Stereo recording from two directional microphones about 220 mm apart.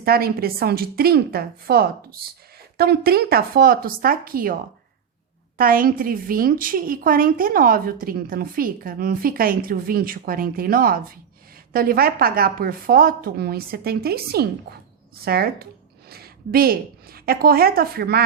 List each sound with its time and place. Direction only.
0.0 s speech: 45° right (ahead or behind)
5.5 s a woman's voice: 40° right (ahead or behind)